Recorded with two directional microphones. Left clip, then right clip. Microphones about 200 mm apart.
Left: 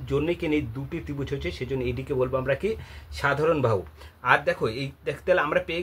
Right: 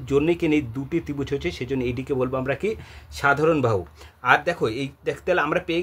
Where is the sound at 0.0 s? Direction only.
50° right (ahead or behind).